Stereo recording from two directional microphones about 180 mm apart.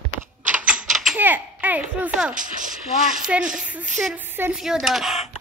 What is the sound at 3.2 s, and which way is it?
A woman's voice, 5° right (ahead or behind).